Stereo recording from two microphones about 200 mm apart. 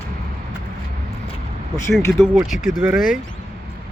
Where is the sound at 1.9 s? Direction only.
Centre (ahead or behind).